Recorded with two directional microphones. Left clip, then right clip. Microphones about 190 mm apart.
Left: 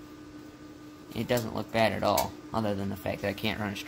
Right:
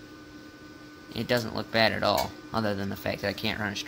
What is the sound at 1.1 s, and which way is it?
Speech, centre (ahead or behind).